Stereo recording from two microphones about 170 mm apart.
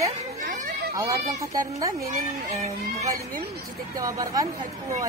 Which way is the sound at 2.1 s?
45° right (ahead or behind).